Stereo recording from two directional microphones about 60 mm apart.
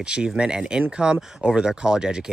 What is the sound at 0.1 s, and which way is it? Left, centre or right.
Speech, centre.